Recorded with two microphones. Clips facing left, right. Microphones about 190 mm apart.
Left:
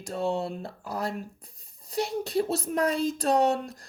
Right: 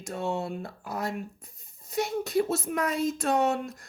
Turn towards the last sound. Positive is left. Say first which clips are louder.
# left 2 dB
turn(degrees=35)  # may be behind; listen again after turning